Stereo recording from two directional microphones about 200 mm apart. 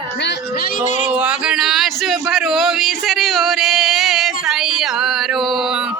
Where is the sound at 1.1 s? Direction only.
5° right (ahead or behind).